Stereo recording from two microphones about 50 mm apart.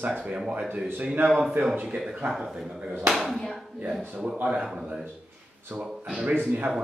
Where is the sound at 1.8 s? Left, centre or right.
Centre.